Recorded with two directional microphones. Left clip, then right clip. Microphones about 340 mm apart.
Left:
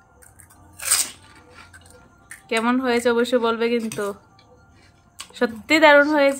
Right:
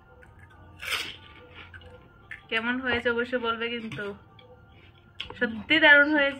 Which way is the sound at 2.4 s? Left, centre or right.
Centre.